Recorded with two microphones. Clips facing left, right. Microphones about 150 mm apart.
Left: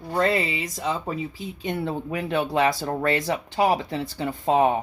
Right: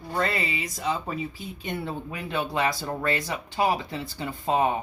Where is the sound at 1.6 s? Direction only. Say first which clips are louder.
Left 5 dB; 90° left.